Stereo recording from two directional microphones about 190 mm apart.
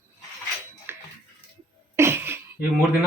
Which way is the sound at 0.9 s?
10° right (ahead or behind).